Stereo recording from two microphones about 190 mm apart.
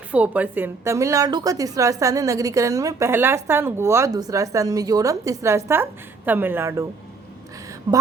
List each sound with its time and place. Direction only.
0.1 s a woman's voice: 10° right (ahead or behind)